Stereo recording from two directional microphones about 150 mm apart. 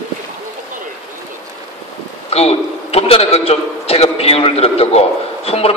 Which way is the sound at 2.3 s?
45° left (ahead or behind).